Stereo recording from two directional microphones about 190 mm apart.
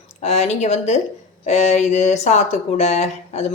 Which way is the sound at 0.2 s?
35° left (ahead or behind).